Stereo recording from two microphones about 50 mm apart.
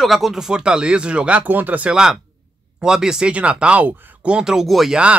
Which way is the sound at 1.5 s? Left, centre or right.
Right.